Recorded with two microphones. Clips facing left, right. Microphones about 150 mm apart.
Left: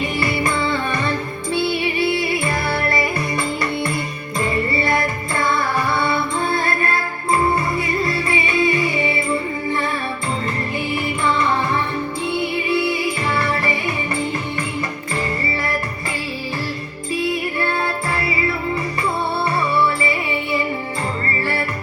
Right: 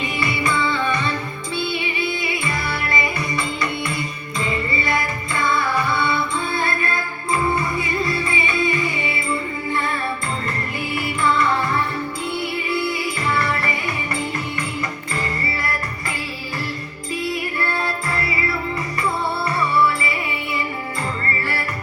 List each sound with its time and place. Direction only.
0.0 s music: 50° left (ahead or behind)
2.4 s music: 50° left (ahead or behind)
6.6 s music: 45° left (ahead or behind)
8.5 s music: 20° left (ahead or behind)
10.9 s music: 25° left (ahead or behind)
13.3 s music: 25° left (ahead or behind)